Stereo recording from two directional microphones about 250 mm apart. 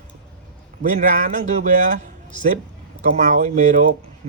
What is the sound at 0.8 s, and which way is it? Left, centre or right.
Speech, right.